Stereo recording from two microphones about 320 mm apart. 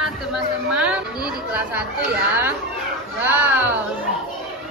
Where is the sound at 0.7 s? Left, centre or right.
Centre.